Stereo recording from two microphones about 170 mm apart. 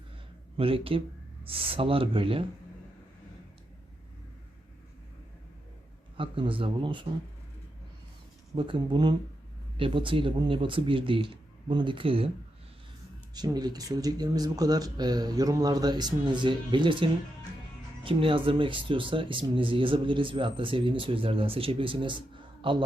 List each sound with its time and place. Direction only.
0.5 s speech: 35° right (ahead or behind)
6.1 s speech: 30° right (ahead or behind)
8.5 s speech: 30° right (ahead or behind)
13.3 s speech: 25° right (ahead or behind)